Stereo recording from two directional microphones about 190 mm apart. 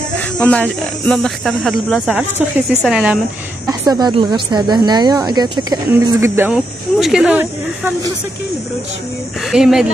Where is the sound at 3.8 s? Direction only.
20° right (ahead or behind).